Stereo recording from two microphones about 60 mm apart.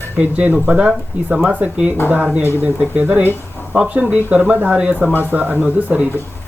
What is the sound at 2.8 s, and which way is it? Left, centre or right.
Speech, right.